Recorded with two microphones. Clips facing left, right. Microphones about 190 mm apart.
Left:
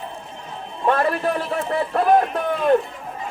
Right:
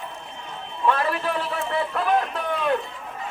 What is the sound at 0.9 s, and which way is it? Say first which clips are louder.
A man's voice: left 4 dB; 45° left (ahead or behind).